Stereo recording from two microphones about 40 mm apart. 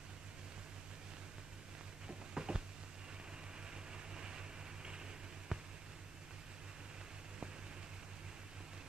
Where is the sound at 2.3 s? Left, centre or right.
Centre.